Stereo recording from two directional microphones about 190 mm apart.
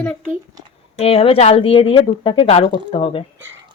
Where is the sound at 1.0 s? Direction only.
30° left (ahead or behind).